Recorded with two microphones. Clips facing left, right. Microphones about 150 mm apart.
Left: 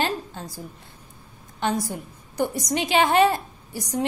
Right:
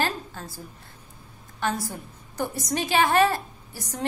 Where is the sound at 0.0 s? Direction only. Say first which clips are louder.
Left 2 dB; 20° left (ahead or behind).